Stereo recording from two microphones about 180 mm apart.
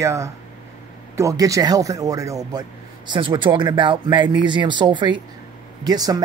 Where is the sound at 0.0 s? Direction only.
15° right (ahead or behind).